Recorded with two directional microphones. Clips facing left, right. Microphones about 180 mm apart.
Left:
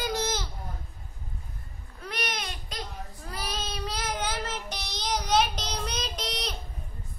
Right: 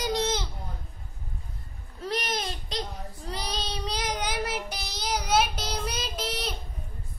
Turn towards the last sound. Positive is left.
turn(degrees=-5)  # may be behind; listen again after turning